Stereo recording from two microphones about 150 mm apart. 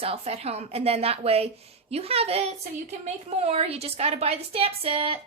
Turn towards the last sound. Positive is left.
turn(degrees=-40)  # may be behind; listen again after turning